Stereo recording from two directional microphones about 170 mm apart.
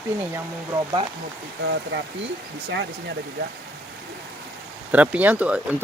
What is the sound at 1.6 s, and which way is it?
Speech, 90° right.